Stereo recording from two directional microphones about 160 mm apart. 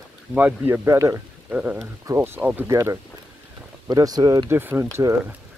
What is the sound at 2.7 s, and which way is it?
Speech, 20° right (ahead or behind).